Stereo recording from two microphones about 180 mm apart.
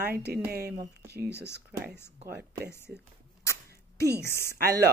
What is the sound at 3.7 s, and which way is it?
Sneeze, 65° right (ahead or behind).